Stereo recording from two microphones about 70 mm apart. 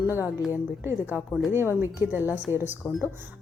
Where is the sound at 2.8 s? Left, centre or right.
Left.